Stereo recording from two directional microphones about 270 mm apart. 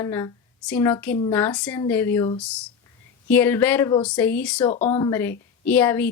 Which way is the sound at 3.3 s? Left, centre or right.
Centre.